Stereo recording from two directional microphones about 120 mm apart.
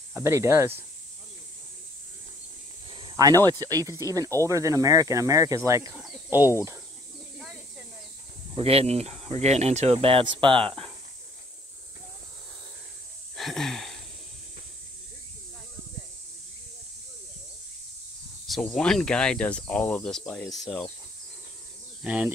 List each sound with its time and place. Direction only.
0.1 s speech: 20° right (ahead or behind)
2.9 s snake: 40° right (ahead or behind)
3.4 s speech: 30° right (ahead or behind)
8.5 s speech: 55° right (ahead or behind)
13.4 s a sound: centre (ahead or behind)
18.5 s speech: 5° left (ahead or behind)
22.0 s speech: 10° right (ahead or behind)